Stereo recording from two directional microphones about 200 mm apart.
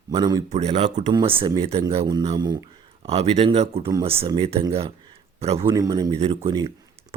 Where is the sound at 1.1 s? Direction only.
25° right (ahead or behind).